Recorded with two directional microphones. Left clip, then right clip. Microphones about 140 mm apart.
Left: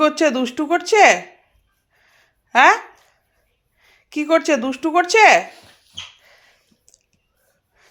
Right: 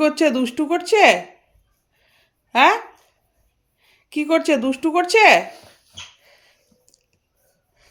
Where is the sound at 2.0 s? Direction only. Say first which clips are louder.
Left 3 dB; 10° right (ahead or behind).